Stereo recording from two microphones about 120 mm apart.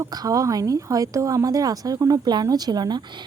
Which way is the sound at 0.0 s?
30° right (ahead or behind).